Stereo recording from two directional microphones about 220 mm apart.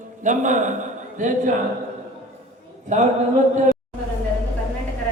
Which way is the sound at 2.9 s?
35° right (ahead or behind).